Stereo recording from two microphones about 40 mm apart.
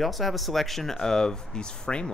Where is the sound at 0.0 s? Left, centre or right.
Centre.